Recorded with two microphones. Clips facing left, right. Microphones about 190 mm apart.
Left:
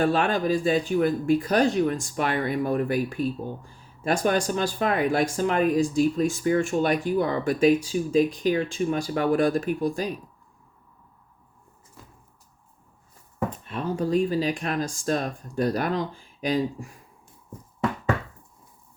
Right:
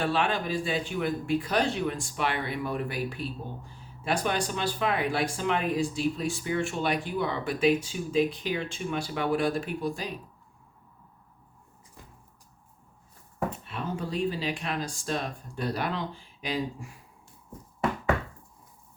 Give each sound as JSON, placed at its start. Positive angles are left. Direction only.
{"t": 0.0, "sound": "speech", "side_deg": 45}
{"t": 13.5, "sound": "speech", "side_deg": 40}